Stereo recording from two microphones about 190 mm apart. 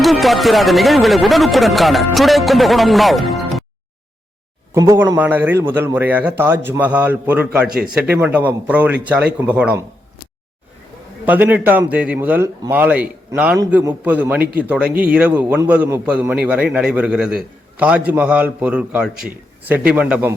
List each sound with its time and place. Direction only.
0.0 s speech: centre (ahead or behind)
4.7 s a man's voice: 15° right (ahead or behind)
11.3 s a man's voice: 10° right (ahead or behind)